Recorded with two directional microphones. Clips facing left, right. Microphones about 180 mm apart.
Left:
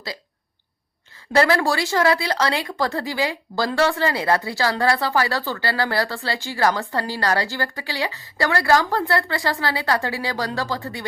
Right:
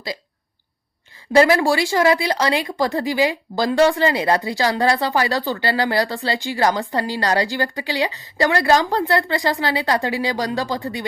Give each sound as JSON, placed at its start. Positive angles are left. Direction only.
{"t": 1.3, "sound": "speech", "side_deg": -15}